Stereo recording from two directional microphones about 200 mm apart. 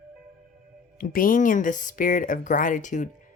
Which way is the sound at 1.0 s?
45° left (ahead or behind).